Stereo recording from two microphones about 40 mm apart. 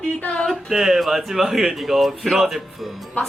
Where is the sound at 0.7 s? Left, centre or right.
Centre.